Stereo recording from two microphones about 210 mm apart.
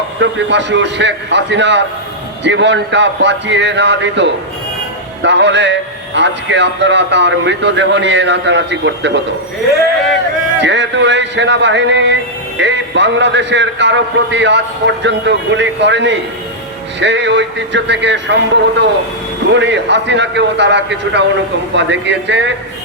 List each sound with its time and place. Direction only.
0.2 s a man's voice: 60° right (ahead or behind)
10.6 s a man's voice: 55° right (ahead or behind)